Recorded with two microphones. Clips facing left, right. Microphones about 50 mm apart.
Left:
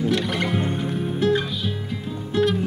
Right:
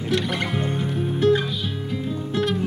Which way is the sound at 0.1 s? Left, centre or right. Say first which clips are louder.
Left 1 dB; centre.